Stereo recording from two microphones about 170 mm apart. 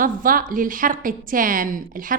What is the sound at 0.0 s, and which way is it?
A woman's voice, 55° right (ahead or behind).